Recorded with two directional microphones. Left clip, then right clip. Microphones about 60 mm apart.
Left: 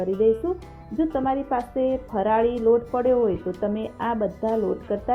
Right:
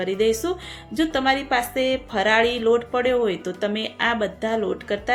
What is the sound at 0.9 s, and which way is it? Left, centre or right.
Speech, right.